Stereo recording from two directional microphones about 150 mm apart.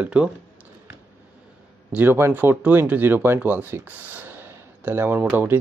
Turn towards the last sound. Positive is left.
turn(degrees=-15)  # may be behind; listen again after turning